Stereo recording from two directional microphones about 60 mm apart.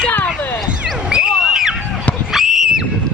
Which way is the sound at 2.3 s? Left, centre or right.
Centre.